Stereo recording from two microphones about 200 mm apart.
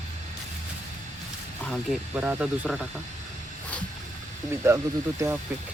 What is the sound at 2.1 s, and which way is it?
Speech, 10° right (ahead or behind).